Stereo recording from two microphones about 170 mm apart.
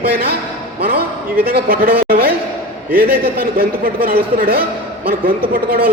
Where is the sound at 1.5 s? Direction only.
60° right (ahead or behind).